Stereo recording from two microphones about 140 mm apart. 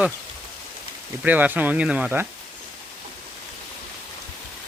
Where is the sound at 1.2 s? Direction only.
10° right (ahead or behind).